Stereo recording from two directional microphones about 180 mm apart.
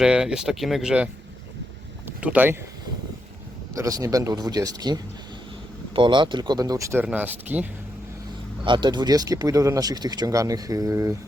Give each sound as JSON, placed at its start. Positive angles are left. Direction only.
{"t": 0.0, "sound": "speech", "side_deg": -5}
{"t": 3.8, "sound": "speech", "side_deg": -20}
{"t": 8.6, "sound": "speech", "side_deg": -25}